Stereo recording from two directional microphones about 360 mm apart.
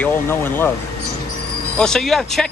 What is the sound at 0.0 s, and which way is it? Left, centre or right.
Speech, centre.